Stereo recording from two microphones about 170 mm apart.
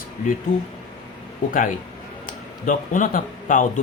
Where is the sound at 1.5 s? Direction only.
50° left (ahead or behind).